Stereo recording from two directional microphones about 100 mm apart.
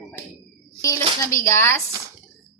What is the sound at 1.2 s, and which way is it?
Speech, 30° left (ahead or behind).